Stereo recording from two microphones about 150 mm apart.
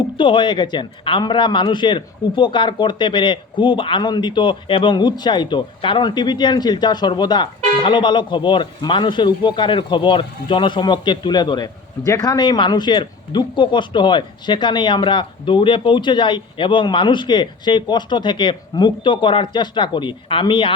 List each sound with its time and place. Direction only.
0.2 s a man's voice: 35° left (ahead or behind)